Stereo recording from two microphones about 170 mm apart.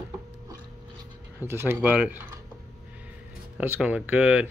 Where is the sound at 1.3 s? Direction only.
15° right (ahead or behind).